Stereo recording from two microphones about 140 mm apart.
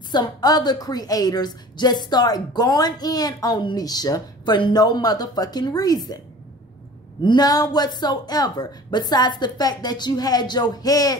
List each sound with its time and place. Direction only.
0.1 s a woman's voice: 30° left (ahead or behind)
7.2 s a woman's voice: 30° left (ahead or behind)